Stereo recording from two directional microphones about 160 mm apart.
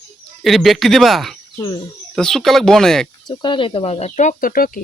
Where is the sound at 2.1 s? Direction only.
5° left (ahead or behind).